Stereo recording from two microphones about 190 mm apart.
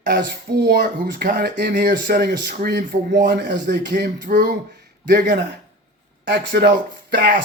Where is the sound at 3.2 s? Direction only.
65° right (ahead or behind).